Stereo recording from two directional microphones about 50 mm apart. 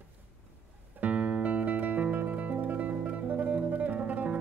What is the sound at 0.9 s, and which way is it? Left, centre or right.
Music, right.